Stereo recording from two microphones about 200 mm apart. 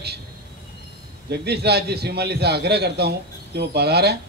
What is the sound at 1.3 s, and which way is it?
A man's voice, 55° right (ahead or behind).